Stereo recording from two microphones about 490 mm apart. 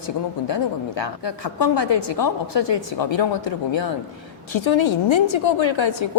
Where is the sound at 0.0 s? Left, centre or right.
Left.